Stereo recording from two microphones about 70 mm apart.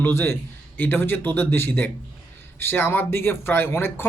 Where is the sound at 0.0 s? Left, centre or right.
Left.